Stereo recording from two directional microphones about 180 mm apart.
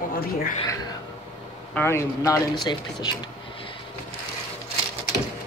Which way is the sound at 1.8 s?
15° left (ahead or behind).